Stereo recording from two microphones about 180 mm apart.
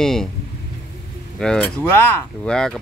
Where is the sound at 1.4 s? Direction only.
5° left (ahead or behind).